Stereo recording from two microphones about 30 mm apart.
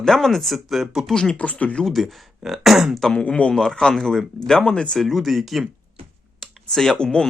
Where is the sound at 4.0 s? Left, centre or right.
Centre.